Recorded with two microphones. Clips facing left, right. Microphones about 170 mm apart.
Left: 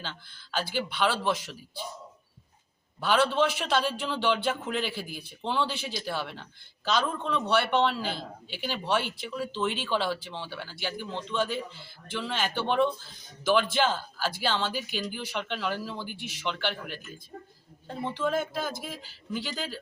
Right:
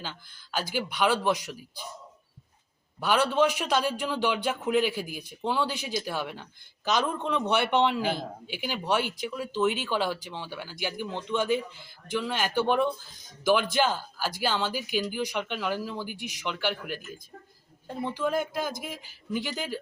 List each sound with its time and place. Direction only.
0.0 s speech: 10° right (ahead or behind)
3.0 s speech: 10° right (ahead or behind)